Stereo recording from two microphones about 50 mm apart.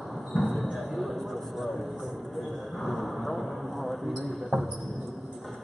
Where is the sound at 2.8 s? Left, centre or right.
Centre.